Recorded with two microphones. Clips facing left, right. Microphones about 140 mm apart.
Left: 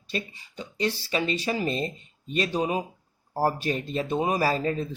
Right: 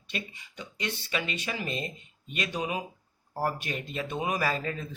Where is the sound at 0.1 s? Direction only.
35° left (ahead or behind).